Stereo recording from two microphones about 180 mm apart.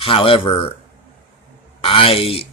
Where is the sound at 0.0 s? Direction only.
30° left (ahead or behind).